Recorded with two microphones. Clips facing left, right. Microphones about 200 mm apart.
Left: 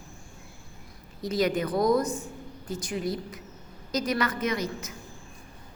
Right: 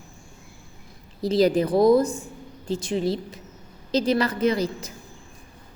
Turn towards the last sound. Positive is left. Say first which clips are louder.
# right 7 dB
turn(degrees=-30)  # may be behind; listen again after turning